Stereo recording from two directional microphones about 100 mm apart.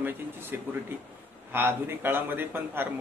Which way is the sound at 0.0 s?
20° right (ahead or behind).